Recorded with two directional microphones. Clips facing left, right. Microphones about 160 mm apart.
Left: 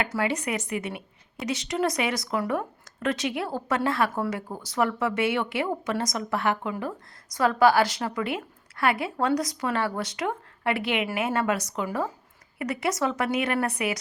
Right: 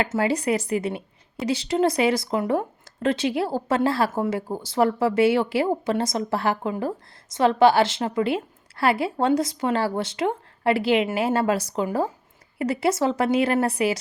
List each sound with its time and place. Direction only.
0.0 s a woman's voice: 30° right (ahead or behind)